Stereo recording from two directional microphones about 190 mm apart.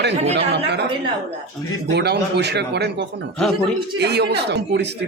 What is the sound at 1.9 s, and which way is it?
Speech, 60° right (ahead or behind).